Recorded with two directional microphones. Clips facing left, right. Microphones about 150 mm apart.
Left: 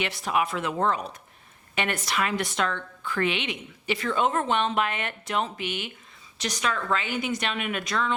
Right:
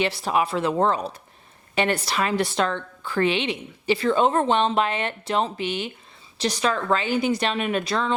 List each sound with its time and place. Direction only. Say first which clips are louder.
0.0 s a woman's voice: right 4 dB; 30° right (ahead or behind)